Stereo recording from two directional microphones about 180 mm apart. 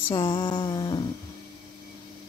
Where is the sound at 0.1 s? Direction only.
25° left (ahead or behind).